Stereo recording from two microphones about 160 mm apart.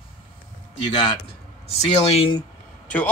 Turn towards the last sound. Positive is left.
turn(degrees=10)  # may be behind; listen again after turning